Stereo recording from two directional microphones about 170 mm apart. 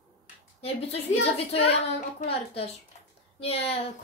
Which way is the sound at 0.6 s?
35° left (ahead or behind).